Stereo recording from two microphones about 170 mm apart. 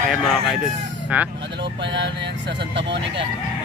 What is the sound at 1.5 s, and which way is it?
Speech, 90° right.